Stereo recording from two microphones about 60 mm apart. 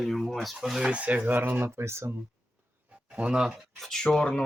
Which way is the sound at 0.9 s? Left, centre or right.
Right.